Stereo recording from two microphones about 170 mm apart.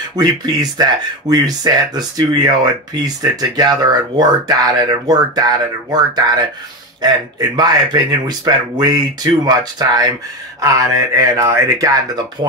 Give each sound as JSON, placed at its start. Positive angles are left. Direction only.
{"t": 0.1, "sound": "speech", "side_deg": -25}